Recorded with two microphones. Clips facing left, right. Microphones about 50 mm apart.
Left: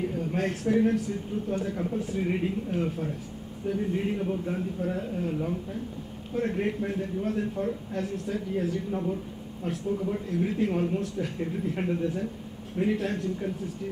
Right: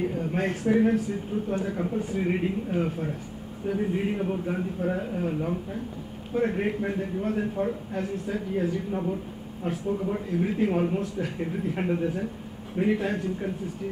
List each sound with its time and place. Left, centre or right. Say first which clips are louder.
0.2 s a sound: right 1 dB; centre
0.5 s speech: right 2 dB; centre
2.2 s speech: right 2 dB; centre